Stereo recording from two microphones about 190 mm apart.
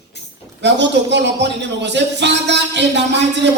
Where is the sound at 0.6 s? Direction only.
65° right (ahead or behind).